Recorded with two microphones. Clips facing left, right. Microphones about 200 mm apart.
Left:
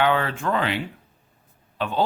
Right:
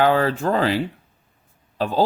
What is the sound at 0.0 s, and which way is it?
Speech, 35° right (ahead or behind).